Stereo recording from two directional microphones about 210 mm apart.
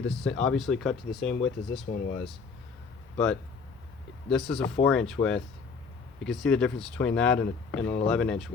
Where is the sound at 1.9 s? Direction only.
50° left (ahead or behind).